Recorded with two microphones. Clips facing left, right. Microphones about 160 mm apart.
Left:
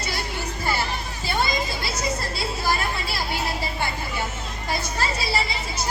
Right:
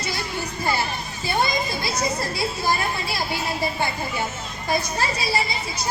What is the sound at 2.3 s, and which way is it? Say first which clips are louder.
Music: right 2 dB; 15° right (ahead or behind).